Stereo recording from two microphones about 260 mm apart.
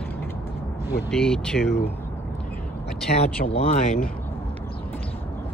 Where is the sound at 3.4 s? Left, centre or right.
Left.